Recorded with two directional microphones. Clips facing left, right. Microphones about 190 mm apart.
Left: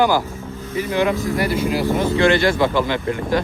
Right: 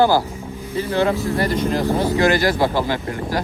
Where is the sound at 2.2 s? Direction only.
25° left (ahead or behind).